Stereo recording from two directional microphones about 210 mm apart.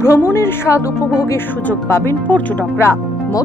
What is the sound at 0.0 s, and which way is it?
Speech, 15° left (ahead or behind).